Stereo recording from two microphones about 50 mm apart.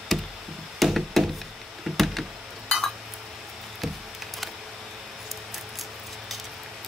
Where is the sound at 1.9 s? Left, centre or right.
Centre.